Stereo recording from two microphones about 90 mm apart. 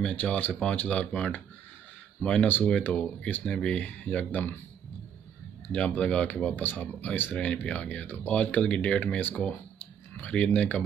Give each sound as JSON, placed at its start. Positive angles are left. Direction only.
{"t": 0.1, "sound": "speech", "side_deg": 20}
{"t": 5.7, "sound": "speech", "side_deg": 15}